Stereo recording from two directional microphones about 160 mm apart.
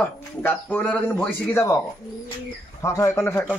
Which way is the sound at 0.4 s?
10° left (ahead or behind).